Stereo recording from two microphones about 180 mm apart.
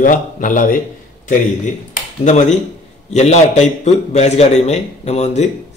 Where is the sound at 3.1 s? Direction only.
40° left (ahead or behind).